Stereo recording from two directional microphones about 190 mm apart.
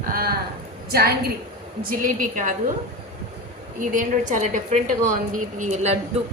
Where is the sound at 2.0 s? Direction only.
45° right (ahead or behind).